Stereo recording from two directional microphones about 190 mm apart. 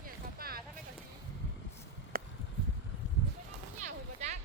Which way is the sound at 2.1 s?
50° right (ahead or behind).